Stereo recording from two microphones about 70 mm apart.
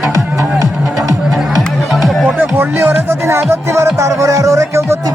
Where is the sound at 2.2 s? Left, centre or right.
Right.